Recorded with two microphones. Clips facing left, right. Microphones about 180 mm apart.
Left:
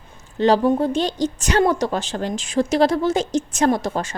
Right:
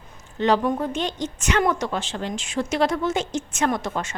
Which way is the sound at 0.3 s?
35° left (ahead or behind).